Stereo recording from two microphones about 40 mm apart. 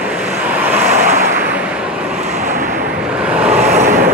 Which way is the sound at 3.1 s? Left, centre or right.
Right.